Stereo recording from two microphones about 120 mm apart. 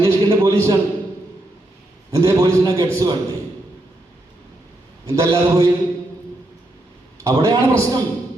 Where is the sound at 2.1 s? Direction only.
25° right (ahead or behind).